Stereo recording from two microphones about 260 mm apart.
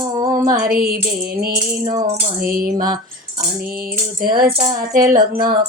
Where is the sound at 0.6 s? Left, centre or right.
Right.